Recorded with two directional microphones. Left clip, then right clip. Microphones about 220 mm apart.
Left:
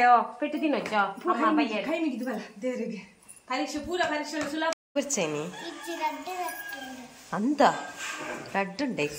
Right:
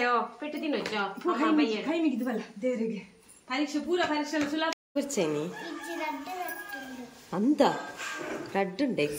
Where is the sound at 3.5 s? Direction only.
15° right (ahead or behind).